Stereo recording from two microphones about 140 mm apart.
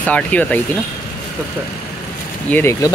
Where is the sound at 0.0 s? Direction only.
10° left (ahead or behind).